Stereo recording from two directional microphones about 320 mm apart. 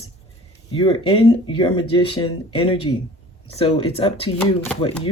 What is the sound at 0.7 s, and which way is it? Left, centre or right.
Speech, centre.